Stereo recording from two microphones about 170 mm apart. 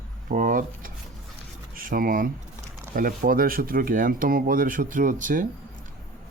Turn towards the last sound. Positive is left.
turn(degrees=-50)  # may be behind; listen again after turning